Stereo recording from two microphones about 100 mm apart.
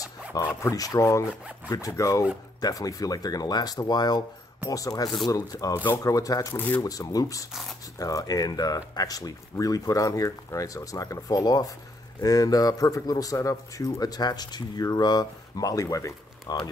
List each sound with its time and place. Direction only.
0.0 s zipper: 35° left (ahead or behind)
0.6 s speech: 35° left (ahead or behind)
6.5 s speech: 20° left (ahead or behind)
6.8 s speech: 40° left (ahead or behind)